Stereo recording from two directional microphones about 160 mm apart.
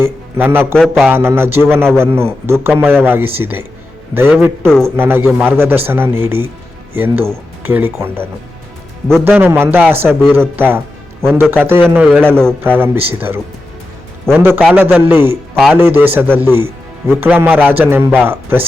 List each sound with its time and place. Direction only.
0.0 s a man's voice: 15° right (ahead or behind)